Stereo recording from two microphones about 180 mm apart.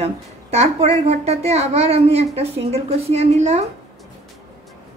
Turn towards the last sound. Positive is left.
turn(degrees=-40)  # may be behind; listen again after turning